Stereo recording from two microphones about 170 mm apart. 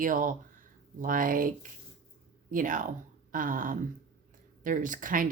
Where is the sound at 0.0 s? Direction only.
50° right (ahead or behind).